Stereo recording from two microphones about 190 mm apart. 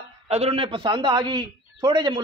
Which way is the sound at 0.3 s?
30° right (ahead or behind).